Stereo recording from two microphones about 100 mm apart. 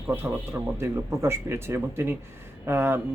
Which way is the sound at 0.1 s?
25° right (ahead or behind).